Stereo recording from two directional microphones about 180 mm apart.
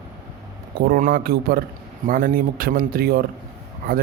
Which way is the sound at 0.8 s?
55° right (ahead or behind).